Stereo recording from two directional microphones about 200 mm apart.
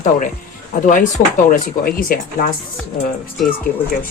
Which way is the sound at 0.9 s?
40° left (ahead or behind).